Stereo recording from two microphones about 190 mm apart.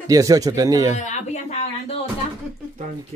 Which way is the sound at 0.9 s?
40° left (ahead or behind).